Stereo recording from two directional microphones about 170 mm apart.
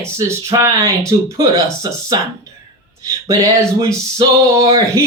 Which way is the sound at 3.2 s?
20° right (ahead or behind).